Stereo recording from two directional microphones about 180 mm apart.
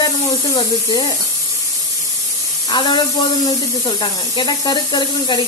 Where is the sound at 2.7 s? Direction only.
25° left (ahead or behind).